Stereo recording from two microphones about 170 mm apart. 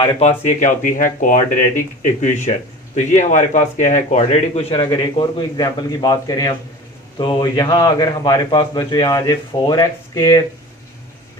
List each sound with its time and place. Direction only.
0.2 s a man's voice: 45° left (ahead or behind); by 10.4 s 20° left (ahead or behind)